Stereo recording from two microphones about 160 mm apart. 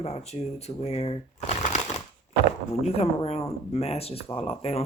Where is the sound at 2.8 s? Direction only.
40° left (ahead or behind).